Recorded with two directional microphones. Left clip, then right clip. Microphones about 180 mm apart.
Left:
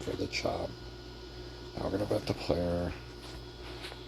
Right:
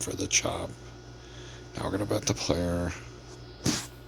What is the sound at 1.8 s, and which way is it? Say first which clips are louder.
Speech: right 2 dB; 20° right (ahead or behind).